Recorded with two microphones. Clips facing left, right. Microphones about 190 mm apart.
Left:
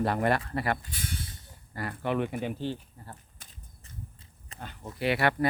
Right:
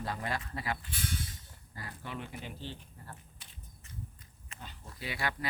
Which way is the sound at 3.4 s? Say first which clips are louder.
Left 3 dB; 45° left (ahead or behind).